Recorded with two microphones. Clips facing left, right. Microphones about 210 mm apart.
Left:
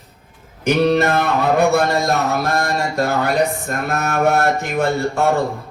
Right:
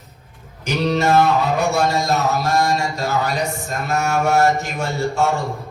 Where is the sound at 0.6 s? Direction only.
55° left (ahead or behind).